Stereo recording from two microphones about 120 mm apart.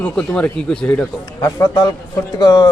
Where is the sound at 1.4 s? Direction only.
30° left (ahead or behind).